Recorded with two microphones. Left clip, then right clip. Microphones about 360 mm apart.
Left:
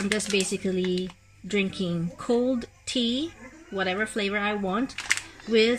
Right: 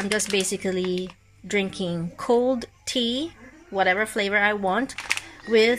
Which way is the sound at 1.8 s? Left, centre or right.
Right.